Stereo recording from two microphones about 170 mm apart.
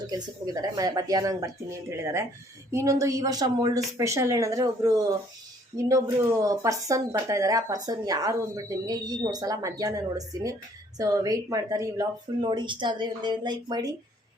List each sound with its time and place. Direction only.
0.1 s speech: 20° right (ahead or behind)
2.7 s speech: 20° right (ahead or behind)